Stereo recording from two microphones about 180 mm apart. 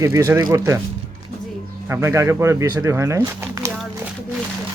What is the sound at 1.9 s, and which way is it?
Speech, 15° right (ahead or behind).